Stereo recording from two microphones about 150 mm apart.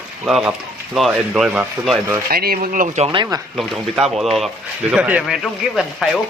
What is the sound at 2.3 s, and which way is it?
Speech, 85° right.